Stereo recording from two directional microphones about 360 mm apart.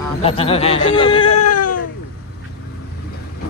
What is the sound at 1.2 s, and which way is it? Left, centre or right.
Baby cry, left.